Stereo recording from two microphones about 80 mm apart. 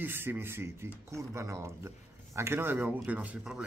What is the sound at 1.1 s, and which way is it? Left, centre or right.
Speech, right.